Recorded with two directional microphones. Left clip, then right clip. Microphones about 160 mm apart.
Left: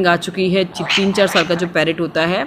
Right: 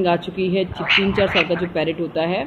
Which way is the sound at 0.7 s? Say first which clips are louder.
Even; centre (ahead or behind).